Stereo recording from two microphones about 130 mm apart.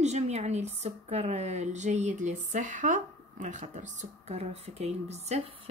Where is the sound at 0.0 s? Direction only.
60° right (ahead or behind).